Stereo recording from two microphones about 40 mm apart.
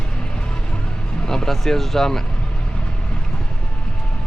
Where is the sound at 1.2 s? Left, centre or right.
Centre.